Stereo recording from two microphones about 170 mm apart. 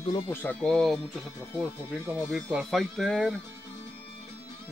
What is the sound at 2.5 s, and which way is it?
Speech, centre (ahead or behind).